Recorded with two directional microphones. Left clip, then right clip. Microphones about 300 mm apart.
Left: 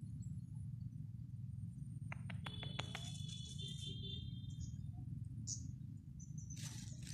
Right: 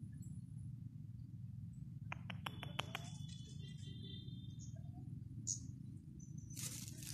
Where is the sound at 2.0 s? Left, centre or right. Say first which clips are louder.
Right 3 dB; centre.